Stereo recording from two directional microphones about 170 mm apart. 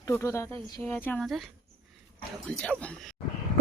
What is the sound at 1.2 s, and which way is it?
A woman's voice, centre (ahead or behind).